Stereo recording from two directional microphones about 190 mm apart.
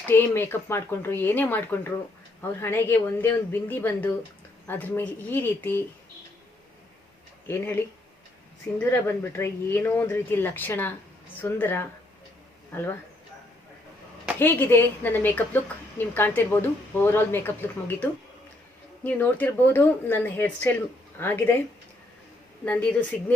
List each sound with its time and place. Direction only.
0.1 s a woman's voice: 10° left (ahead or behind)
8.8 s a woman's voice: 10° left (ahead or behind)
14.3 s a woman's voice: 10° left (ahead or behind)
22.6 s a woman's voice: 5° left (ahead or behind)